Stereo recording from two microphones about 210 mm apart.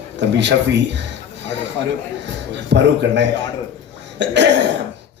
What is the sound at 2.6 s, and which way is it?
A man's voice, 55° right (ahead or behind).